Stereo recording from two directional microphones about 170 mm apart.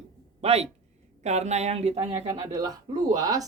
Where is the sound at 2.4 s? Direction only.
20° right (ahead or behind).